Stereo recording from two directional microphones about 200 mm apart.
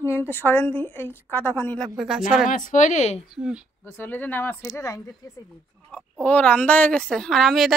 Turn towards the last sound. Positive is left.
turn(degrees=0)  # may be behind; listen again after turning